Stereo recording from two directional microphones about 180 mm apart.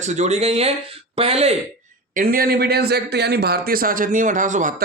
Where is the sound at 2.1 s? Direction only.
55° right (ahead or behind).